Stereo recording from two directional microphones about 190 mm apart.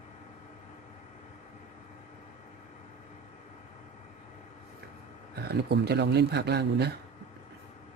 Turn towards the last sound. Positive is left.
turn(degrees=-65)  # may be behind; listen again after turning